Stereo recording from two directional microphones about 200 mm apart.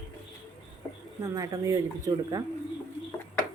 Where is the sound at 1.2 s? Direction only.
15° right (ahead or behind).